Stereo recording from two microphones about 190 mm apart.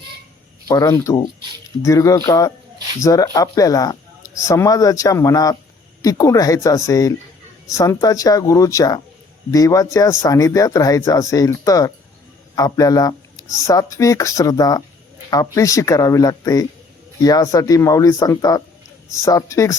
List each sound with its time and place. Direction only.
0.7 s speech: 20° left (ahead or behind)